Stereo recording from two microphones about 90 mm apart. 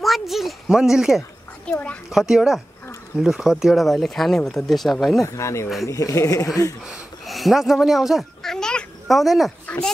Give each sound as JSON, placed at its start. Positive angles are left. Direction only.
{"t": 0.0, "sound": "a child's voice", "side_deg": 0}
{"t": 1.7, "sound": "a child's voice", "side_deg": 15}
{"t": 2.0, "sound": "speech", "side_deg": -5}
{"t": 5.2, "sound": "speech", "side_deg": 35}
{"t": 6.9, "sound": "cat", "side_deg": 0}